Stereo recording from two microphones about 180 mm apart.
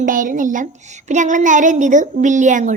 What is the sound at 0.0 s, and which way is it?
Child singing, 50° right (ahead or behind).